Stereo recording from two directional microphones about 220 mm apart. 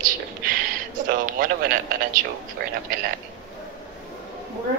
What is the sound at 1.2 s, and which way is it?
Speech, 40° right (ahead or behind).